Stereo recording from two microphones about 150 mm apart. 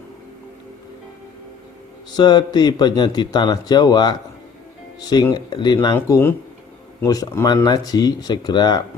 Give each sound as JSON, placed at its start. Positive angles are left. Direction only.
{"t": 2.1, "sound": "a man's voice", "side_deg": 30}
{"t": 6.0, "sound": "a man's voice", "side_deg": 15}